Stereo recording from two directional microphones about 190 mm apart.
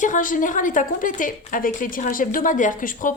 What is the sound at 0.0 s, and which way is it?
A woman's voice, 45° left (ahead or behind).